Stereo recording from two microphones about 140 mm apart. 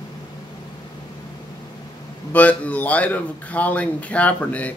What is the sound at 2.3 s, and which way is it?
A man's voice, 10° left (ahead or behind).